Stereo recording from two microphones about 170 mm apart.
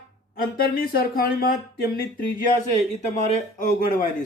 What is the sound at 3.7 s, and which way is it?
Speech, 55° left (ahead or behind).